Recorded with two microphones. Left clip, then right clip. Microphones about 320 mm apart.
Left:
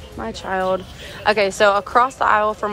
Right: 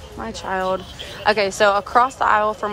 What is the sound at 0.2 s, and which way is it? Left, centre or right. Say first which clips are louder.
Speech: left 1 dB; centre.